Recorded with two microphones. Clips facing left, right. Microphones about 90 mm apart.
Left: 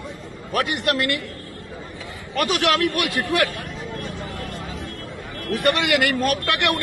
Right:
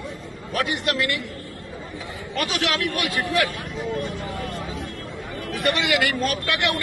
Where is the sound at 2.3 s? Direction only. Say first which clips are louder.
Left 5 dB; 55° left (ahead or behind).